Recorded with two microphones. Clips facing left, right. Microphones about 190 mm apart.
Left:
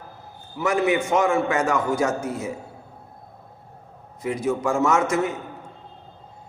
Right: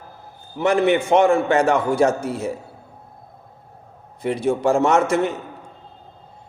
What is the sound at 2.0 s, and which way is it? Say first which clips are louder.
Speech: right 4 dB; 65° right (ahead or behind).